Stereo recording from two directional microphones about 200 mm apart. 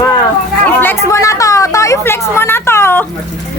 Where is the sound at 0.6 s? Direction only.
10° left (ahead or behind).